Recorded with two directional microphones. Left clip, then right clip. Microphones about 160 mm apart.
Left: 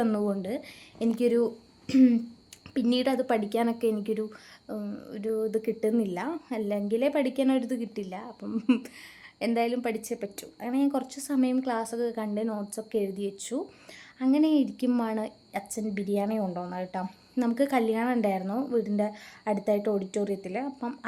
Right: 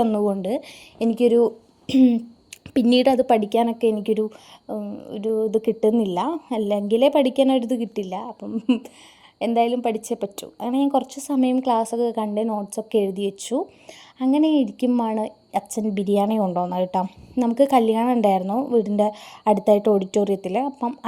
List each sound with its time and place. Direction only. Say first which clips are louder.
0.0 s a woman's voice: right 7 dB; 25° right (ahead or behind)
2.9 s a woman's voice: right 10 dB; 40° right (ahead or behind)
4.8 s speech: right 6 dB; 10° right (ahead or behind)
5.5 s a woman's voice: right 8 dB; 35° right (ahead or behind)
8.5 s speech: right 4 dB; 10° right (ahead or behind)
9.4 s a woman's voice: right 8 dB; 25° right (ahead or behind)
14.8 s speech: right 7 dB; 15° right (ahead or behind)
15.1 s a woman's voice: right 8 dB; 35° right (ahead or behind)
18.8 s a woman's voice: right 9 dB; 40° right (ahead or behind)